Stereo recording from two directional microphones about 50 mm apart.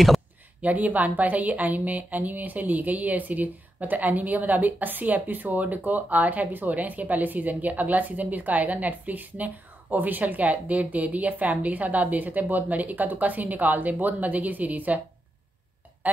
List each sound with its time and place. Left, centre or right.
0.6 s a woman's voice: right